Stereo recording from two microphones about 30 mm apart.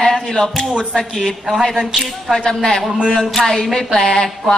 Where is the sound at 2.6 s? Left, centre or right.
Centre.